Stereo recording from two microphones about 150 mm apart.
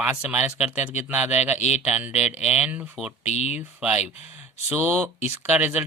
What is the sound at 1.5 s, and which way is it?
Speech, 45° left (ahead or behind).